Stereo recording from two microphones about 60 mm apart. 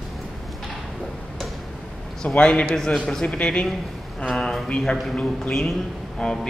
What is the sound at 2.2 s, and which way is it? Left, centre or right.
A man's voice, centre.